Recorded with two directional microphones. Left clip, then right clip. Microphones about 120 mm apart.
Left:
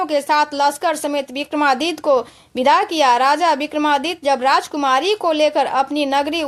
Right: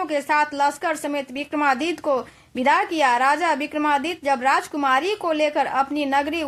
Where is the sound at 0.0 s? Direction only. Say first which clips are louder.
Left 4 dB; 40° left (ahead or behind).